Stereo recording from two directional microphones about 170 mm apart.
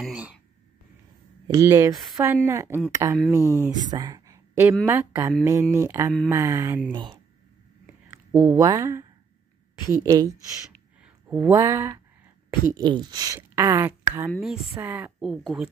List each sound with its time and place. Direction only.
0.0 s speech: 5° right (ahead or behind)
1.5 s speech: 15° right (ahead or behind)
3.9 s a sound: 20° right (ahead or behind)
4.8 s speech: 15° right (ahead or behind)
6.9 s speech: 25° right (ahead or behind)
8.4 s speech: 25° right (ahead or behind)
11.0 s a sound: 5° right (ahead or behind)
11.5 s a woman's voice: 15° right (ahead or behind)
15.1 s speech: centre (ahead or behind)